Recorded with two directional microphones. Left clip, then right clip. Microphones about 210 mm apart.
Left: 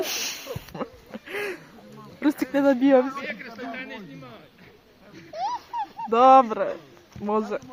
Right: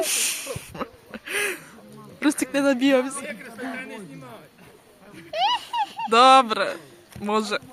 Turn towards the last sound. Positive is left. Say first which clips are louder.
# right 2 dB
turn(degrees=0)  # may be behind; listen again after turning